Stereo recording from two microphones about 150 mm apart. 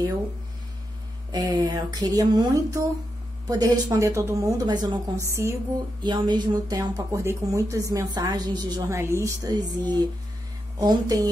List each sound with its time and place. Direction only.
1.3 s speech: 25° right (ahead or behind)
6.0 s speech: 30° right (ahead or behind)